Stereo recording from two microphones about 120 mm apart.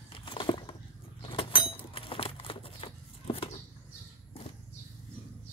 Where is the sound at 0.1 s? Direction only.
45° left (ahead or behind).